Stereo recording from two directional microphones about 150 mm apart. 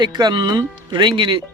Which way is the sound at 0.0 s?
30° right (ahead or behind).